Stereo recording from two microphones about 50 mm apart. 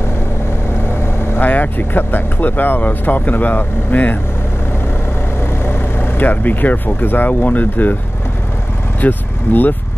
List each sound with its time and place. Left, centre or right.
1.4 s speech: left
5.7 s speech: left
9.0 s vehicle: left